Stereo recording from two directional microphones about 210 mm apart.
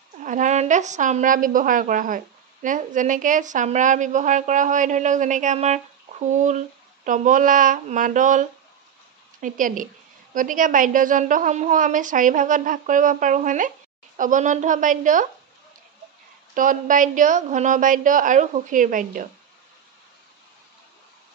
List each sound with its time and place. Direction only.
0.2 s a woman's voice: 35° right (ahead or behind)
16.5 s a woman's voice: 40° right (ahead or behind)